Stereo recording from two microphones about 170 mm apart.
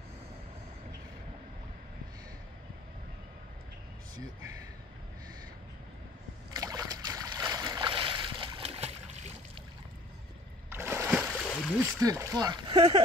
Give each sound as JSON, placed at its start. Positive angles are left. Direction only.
{"t": 6.5, "sound": "boat", "side_deg": -20}
{"t": 10.7, "sound": "splash", "side_deg": -15}
{"t": 11.4, "sound": "a sound", "side_deg": 10}
{"t": 12.0, "sound": "speech", "side_deg": -20}